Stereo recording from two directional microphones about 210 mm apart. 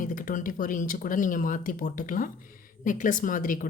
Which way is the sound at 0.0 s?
40° left (ahead or behind).